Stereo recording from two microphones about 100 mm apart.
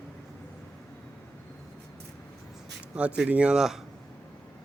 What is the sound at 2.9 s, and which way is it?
Speech, 10° right (ahead or behind).